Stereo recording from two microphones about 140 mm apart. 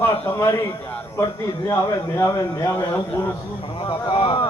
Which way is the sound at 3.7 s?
35° left (ahead or behind).